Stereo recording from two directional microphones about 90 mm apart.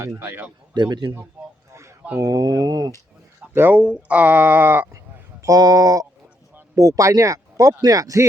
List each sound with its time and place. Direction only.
0.2 s speech: 20° right (ahead or behind)
0.7 s speech: 55° right (ahead or behind)
2.1 s speech: 45° right (ahead or behind)
3.5 s speech: 20° right (ahead or behind)
5.4 s speech: 45° right (ahead or behind)